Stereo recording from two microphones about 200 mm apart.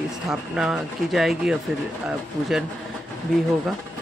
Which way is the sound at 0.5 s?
Centre (ahead or behind).